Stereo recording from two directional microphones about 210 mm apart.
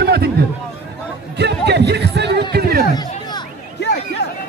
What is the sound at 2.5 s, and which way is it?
Chatter, 45° right (ahead or behind).